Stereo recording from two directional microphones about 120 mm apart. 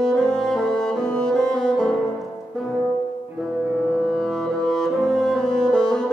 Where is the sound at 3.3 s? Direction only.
Centre (ahead or behind).